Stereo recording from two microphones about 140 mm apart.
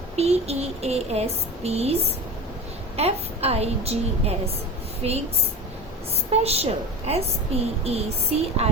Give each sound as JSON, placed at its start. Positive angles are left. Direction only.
{"t": 0.2, "sound": "a woman's voice", "side_deg": -50}
{"t": 6.3, "sound": "a woman's voice", "side_deg": -45}